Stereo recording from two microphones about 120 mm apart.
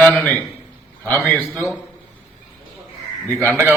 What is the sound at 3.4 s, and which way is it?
Speech, 15° right (ahead or behind).